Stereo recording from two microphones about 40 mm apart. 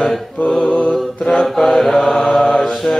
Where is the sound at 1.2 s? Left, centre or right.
Left.